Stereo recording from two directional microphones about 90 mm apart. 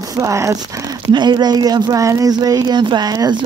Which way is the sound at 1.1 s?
55° right (ahead or behind).